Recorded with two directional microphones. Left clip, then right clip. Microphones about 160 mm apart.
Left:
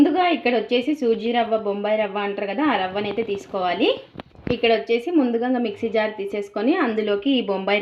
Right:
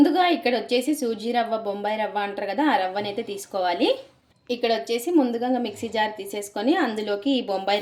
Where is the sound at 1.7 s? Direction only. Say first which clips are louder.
Left 3 dB; 30° left (ahead or behind).